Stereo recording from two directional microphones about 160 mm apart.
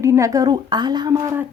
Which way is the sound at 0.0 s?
20° right (ahead or behind).